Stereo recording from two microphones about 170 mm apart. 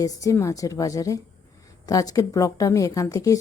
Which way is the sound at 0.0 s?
20° left (ahead or behind).